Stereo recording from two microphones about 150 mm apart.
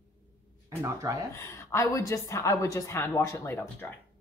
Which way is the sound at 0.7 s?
15° right (ahead or behind).